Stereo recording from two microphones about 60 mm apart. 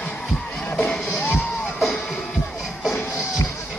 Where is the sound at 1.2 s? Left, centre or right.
Left.